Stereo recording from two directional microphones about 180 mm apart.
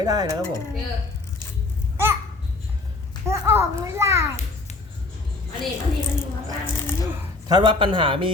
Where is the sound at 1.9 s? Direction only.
15° right (ahead or behind).